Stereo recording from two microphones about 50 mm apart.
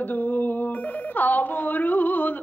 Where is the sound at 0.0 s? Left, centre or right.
Left.